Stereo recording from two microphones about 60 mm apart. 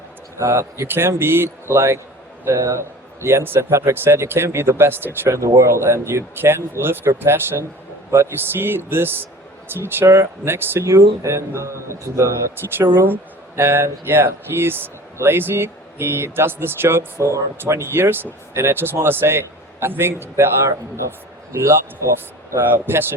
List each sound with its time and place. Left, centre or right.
0.3 s speech: right
0.9 s a man's voice: right
5.3 s a man's voice: right
17.2 s speech: right
21.5 s a man's voice: right
22.7 s speech: right